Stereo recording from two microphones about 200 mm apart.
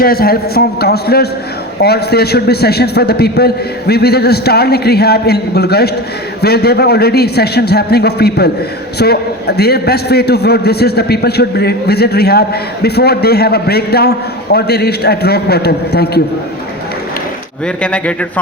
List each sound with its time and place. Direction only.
0.0 s a man's voice: 50° left (ahead or behind)
17.8 s a man's voice: 5° left (ahead or behind)